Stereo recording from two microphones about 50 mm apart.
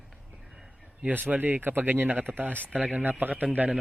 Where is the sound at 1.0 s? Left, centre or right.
Right.